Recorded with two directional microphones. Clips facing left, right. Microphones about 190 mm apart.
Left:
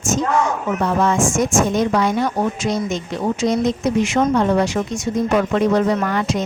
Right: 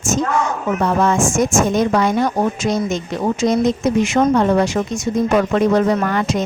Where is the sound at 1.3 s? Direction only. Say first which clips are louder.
Right 1 dB; 50° right (ahead or behind).